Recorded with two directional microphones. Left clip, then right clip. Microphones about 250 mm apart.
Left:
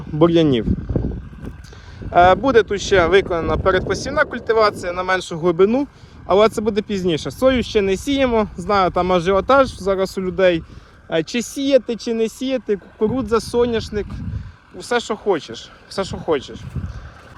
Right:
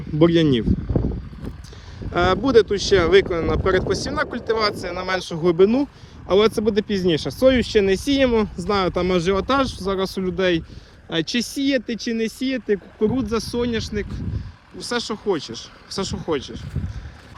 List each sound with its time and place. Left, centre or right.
0.2 s speech: centre
2.0 s speech: centre
4.6 s speech: centre
11.3 s speech: centre